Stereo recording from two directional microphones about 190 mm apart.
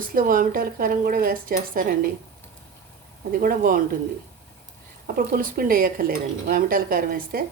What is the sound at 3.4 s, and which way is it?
Speech, 45° right (ahead or behind).